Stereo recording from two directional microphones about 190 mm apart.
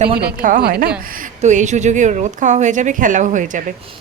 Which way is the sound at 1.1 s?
40° right (ahead or behind).